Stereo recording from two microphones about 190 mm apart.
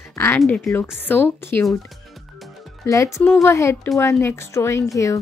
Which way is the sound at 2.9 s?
15° left (ahead or behind).